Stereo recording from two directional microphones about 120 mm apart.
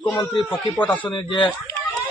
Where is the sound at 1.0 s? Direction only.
45° left (ahead or behind).